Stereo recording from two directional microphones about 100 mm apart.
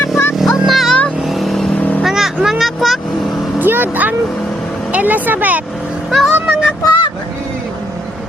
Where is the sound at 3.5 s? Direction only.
20° right (ahead or behind).